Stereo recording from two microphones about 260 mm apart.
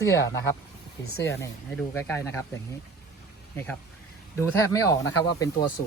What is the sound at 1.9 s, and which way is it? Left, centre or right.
Speech, centre.